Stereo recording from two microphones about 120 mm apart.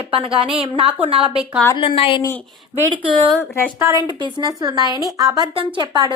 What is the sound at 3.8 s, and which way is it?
A woman's voice, 25° right (ahead or behind).